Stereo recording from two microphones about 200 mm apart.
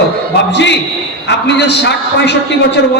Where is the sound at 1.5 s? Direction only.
60° left (ahead or behind).